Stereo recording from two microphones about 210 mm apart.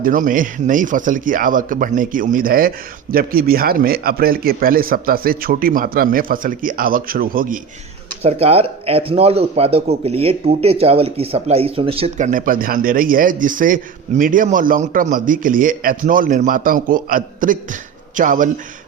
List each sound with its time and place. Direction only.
0.0 s a man's voice: 40° right (ahead or behind)
8.2 s a man's voice: 30° right (ahead or behind)